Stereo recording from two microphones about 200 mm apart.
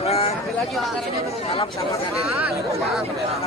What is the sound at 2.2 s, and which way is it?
Speech, 15° right (ahead or behind).